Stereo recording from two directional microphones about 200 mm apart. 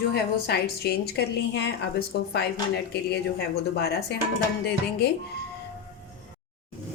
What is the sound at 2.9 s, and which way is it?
Speech, 55° left (ahead or behind).